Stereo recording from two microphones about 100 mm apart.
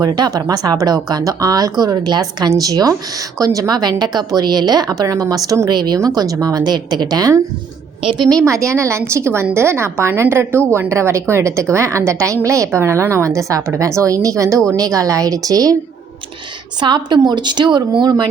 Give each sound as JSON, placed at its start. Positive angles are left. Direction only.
{"t": 0.0, "sound": "a woman's voice", "side_deg": -40}
{"t": 16.8, "sound": "speech", "side_deg": -50}